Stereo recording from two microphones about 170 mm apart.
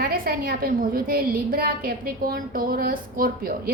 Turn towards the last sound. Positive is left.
turn(degrees=-60)  # may be behind; listen again after turning